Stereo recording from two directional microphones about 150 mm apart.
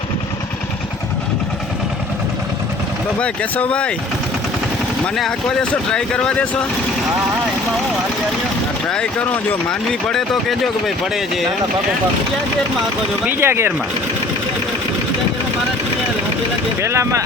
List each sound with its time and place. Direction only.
3.2 s speech: 10° left (ahead or behind)
5.1 s speech: centre (ahead or behind)
8.9 s speech: 10° left (ahead or behind)
13.2 s speech: 15° right (ahead or behind)
16.8 s speech: 20° right (ahead or behind)